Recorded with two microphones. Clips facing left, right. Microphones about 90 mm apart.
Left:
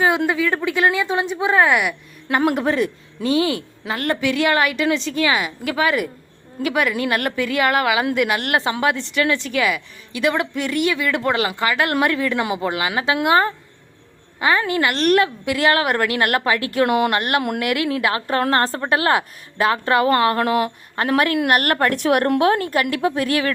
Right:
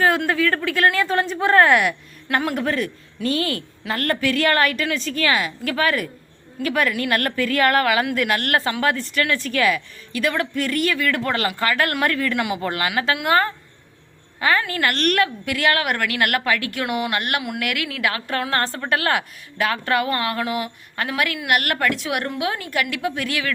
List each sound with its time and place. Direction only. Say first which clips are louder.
0.3 s a woman's voice: left 1 dB; 10° left (ahead or behind)
2.4 s a woman's voice: left 7 dB; 20° left (ahead or behind)
12.6 s a woman's voice: left 1 dB; 15° left (ahead or behind); by 23.6 s 35° left (ahead or behind)